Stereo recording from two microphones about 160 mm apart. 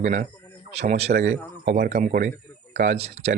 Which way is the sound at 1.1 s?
80° right.